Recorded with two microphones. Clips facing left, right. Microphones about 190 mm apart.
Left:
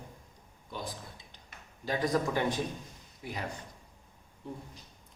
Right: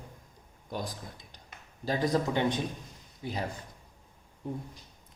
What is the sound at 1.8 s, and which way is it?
A man's voice, 30° right (ahead or behind).